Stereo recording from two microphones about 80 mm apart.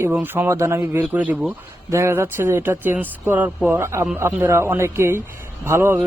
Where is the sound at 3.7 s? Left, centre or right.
Right.